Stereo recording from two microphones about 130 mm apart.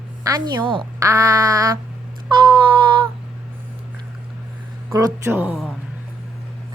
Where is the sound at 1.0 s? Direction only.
25° right (ahead or behind).